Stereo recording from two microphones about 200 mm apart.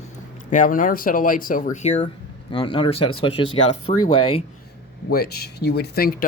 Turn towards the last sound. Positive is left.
turn(degrees=50)  # may be behind; listen again after turning